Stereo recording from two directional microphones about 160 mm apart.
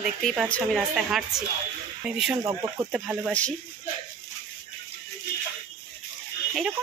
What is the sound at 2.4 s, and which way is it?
Speech, 20° right (ahead or behind).